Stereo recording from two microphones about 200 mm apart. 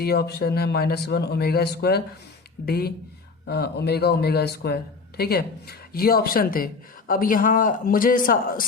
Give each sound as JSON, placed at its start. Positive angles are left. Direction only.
{"t": 0.0, "sound": "speech", "side_deg": 55}